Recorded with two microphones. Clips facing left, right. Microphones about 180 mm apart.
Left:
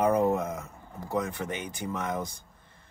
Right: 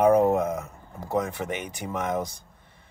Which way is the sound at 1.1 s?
10° right (ahead or behind).